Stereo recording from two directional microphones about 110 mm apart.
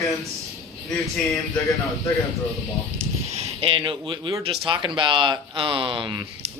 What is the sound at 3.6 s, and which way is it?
Speech, 55° right (ahead or behind).